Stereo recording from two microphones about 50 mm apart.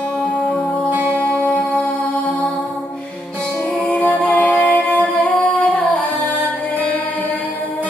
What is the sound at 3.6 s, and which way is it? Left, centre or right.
Music, left.